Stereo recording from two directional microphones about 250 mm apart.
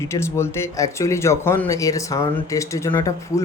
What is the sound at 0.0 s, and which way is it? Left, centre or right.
Speech, centre.